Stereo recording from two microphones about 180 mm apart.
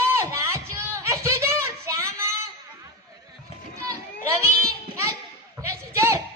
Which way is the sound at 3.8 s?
15° right (ahead or behind).